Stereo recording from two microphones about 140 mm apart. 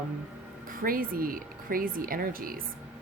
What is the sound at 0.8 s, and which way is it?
Speech, 90° right.